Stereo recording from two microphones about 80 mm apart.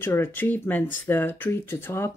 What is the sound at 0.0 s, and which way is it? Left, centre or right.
Speech, left.